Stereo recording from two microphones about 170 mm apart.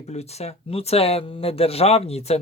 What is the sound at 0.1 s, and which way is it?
Speech, 40° left (ahead or behind).